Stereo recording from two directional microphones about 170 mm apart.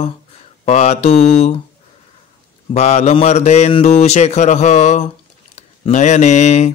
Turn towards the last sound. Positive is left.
turn(degrees=40)  # may be behind; listen again after turning